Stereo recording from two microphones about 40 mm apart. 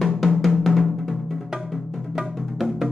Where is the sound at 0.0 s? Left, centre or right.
Centre.